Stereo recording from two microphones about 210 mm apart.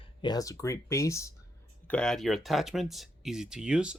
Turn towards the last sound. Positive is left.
turn(degrees=-5)  # may be behind; listen again after turning